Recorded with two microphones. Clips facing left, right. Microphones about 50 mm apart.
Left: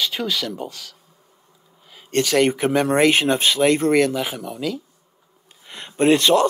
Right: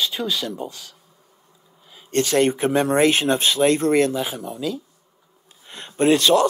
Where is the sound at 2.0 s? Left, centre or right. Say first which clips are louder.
Left 1 dB; left.